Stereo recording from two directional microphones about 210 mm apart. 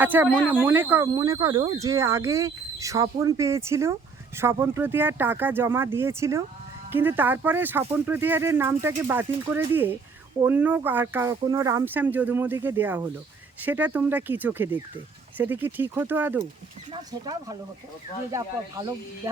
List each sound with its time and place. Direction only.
0.0 s speech: 10° right (ahead or behind)
0.3 s speech: 5° left (ahead or behind)
0.6 s speech: 10° right (ahead or behind)